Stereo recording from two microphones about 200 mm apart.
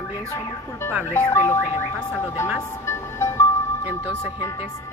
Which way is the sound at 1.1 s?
10° left (ahead or behind).